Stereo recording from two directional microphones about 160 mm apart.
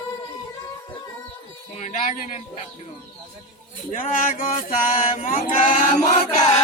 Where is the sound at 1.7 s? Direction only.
50° left (ahead or behind).